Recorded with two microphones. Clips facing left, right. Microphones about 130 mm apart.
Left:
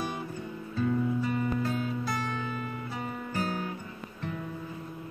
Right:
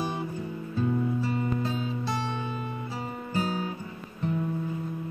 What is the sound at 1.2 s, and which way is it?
Music, 25° right (ahead or behind).